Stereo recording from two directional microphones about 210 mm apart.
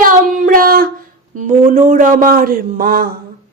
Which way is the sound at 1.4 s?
35° right (ahead or behind).